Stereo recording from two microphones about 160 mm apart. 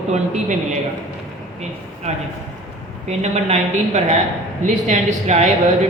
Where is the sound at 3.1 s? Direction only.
45° right (ahead or behind).